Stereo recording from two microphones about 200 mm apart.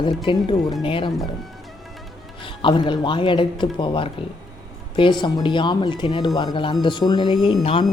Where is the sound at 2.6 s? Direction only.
25° left (ahead or behind).